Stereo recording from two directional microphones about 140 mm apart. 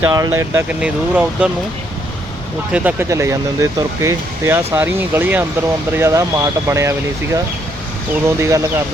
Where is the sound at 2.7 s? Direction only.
10° right (ahead or behind).